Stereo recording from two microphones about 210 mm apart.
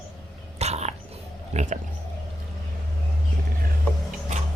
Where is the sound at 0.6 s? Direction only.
30° right (ahead or behind).